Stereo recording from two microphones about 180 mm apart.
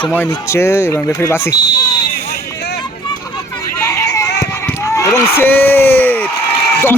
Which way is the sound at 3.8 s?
15° left (ahead or behind).